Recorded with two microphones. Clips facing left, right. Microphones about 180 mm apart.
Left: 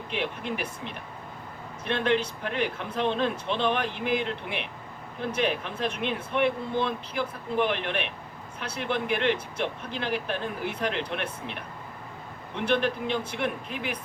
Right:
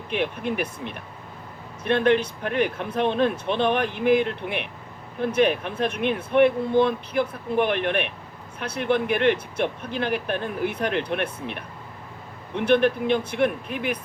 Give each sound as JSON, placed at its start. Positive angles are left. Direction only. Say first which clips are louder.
{"t": 0.1, "sound": "speech", "louder": "right 5 dB", "side_deg": -55}
{"t": 12.6, "sound": "speech", "louder": "right 6 dB", "side_deg": -55}